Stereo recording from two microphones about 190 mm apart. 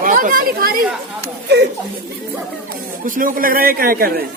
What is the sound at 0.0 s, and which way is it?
Speech, 45° right (ahead or behind).